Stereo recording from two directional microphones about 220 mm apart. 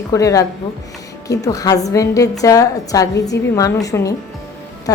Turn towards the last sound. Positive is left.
turn(degrees=15)  # may be behind; listen again after turning